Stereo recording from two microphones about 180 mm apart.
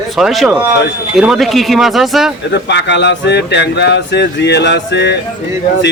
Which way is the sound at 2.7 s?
75° left (ahead or behind).